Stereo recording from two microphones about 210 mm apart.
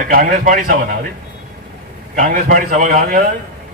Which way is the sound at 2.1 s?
40° right (ahead or behind).